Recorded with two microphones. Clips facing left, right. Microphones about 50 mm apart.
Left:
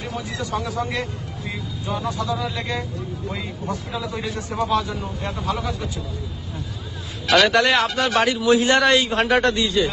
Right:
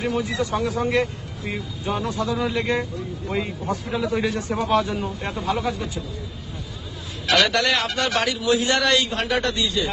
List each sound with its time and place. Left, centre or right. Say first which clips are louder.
0.1 s speech: right 3 dB; right
2.1 s speech: right 2 dB; right
7.3 s speech: left 4 dB; left
7.9 s a man's voice: left 2 dB; centre
8.1 s a man's voice: left 5 dB; left